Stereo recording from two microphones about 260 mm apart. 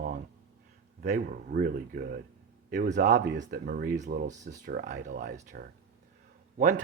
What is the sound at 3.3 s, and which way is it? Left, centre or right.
Speech, right.